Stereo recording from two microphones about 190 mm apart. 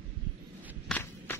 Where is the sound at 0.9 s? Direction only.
15° left (ahead or behind).